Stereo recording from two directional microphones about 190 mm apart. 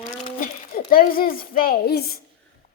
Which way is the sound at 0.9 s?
50° left (ahead or behind).